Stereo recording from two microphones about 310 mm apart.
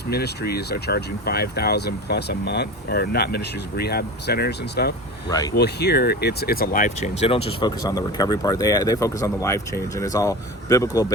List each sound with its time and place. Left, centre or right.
0.1 s speech: left
5.3 s speech: centre
5.5 s speech: left; by 10.8 s centre